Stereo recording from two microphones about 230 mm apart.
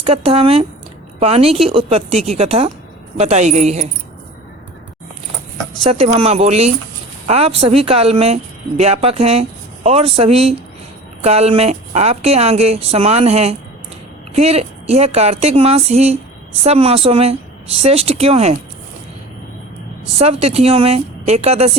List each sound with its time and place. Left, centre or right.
0.0 s a woman's voice: right
5.9 s a woman's voice: right
20.1 s a woman's voice: right